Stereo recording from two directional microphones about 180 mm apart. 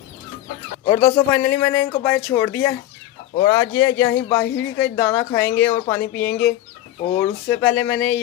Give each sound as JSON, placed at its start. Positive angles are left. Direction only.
{"t": 0.8, "sound": "speech", "side_deg": 20}